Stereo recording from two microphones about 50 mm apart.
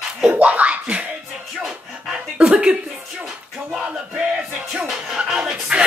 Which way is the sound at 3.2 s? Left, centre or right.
Centre.